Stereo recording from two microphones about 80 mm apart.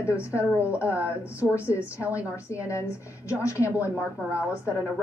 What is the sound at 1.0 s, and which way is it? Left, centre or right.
A woman's voice, left.